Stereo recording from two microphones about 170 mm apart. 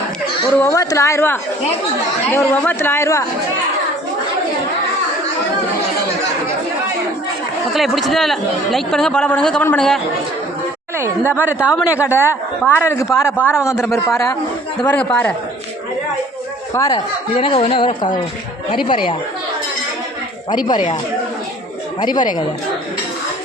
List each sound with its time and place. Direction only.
0.5 s speech: 15° left (ahead or behind)
7.7 s speech: centre (ahead or behind)
10.9 s speech: 15° right (ahead or behind)
12.6 s speech: 15° left (ahead or behind)
14.8 s speech: 10° left (ahead or behind)
16.7 s speech: 20° left (ahead or behind)
17.3 s speech: 30° left (ahead or behind)
20.5 s speech: 25° left (ahead or behind)
22.0 s speech: 25° left (ahead or behind)